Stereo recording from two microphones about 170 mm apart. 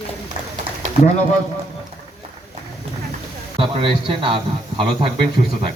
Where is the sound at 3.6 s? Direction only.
30° right (ahead or behind).